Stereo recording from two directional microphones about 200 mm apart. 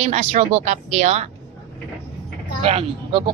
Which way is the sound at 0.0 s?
35° right (ahead or behind).